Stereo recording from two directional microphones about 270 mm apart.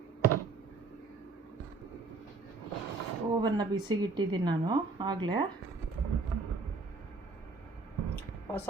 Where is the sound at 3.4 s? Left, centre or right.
Centre.